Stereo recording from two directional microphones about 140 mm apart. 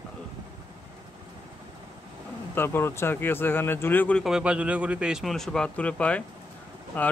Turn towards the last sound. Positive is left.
turn(degrees=10)  # may be behind; listen again after turning